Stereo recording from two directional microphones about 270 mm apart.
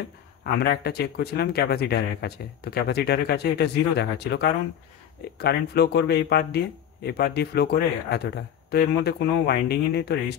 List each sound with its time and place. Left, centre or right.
0.4 s speech: left